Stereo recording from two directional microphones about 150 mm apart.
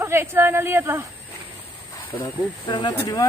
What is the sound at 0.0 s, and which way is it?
Speech, 15° right (ahead or behind).